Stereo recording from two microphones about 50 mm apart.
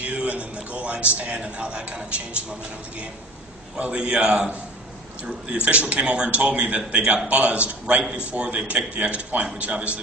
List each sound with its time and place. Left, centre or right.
0.0 s a man's voice: right
3.7 s a man's voice: right
5.7 s a man's voice: right